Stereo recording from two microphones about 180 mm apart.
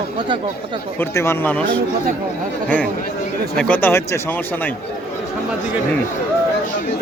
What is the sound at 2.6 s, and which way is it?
Speech, 5° left (ahead or behind).